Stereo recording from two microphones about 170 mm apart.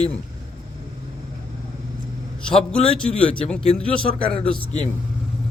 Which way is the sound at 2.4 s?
5° left (ahead or behind).